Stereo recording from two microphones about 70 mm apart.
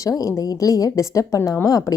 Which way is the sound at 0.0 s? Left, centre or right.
Left.